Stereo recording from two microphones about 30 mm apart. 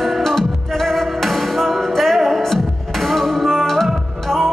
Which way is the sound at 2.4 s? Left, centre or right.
Centre.